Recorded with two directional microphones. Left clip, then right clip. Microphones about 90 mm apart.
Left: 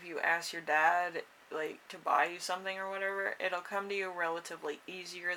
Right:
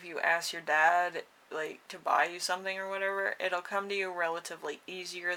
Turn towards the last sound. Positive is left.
turn(degrees=-35)  # may be behind; listen again after turning